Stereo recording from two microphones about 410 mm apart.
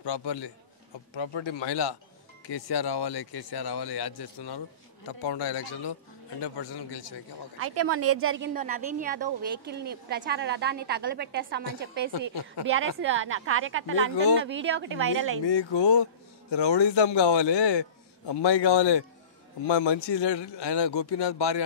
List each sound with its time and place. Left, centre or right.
0.0 s speech: left
2.5 s a man's voice: left
7.6 s a woman's voice: right
8.5 s a woman's voice: centre
12.1 s speech: left
12.7 s a woman's voice: right
15.4 s a man's voice: left
19.7 s a man's voice: left